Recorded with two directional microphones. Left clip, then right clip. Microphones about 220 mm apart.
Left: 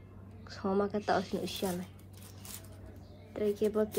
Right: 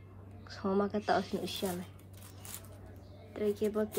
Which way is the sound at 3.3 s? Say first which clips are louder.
Left 2 dB; 5° right (ahead or behind).